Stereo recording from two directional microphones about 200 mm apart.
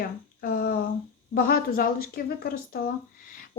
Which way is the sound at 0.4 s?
50° left (ahead or behind).